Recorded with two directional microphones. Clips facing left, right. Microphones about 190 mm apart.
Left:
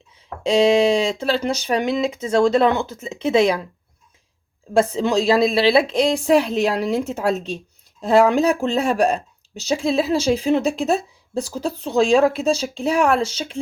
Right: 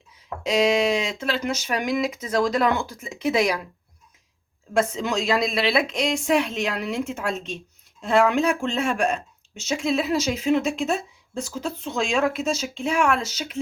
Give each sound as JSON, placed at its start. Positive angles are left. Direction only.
{"t": 0.4, "sound": "speech", "side_deg": 30}
{"t": 4.7, "sound": "speech", "side_deg": 30}